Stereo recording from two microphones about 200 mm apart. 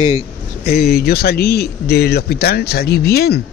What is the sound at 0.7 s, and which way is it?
Speech, 50° left (ahead or behind).